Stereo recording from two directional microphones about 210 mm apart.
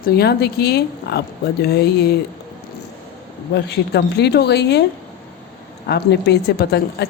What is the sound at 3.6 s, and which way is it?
A woman's voice, 55° left (ahead or behind).